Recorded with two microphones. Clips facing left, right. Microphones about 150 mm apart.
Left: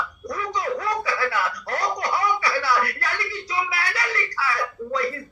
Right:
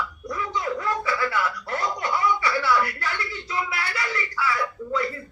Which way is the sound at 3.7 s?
40° left (ahead or behind).